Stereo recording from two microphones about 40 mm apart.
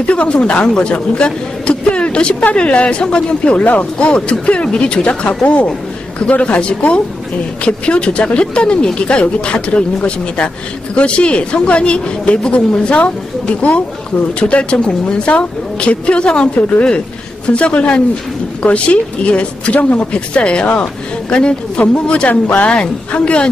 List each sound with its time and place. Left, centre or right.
0.0 s a woman's voice: left
3.5 s speech: left
4.0 s speech: left
22.3 s speech: left
22.7 s speech: left